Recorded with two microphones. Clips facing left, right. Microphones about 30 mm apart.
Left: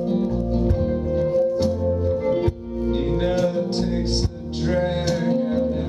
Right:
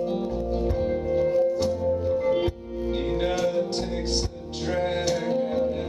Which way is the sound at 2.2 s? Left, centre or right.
Centre.